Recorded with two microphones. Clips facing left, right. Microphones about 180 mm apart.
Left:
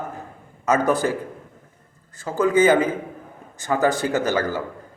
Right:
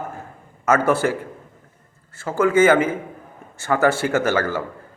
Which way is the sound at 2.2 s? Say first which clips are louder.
Right 1 dB; 15° left (ahead or behind).